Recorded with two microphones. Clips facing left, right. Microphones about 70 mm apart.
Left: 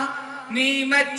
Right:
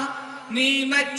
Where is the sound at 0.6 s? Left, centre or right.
Left.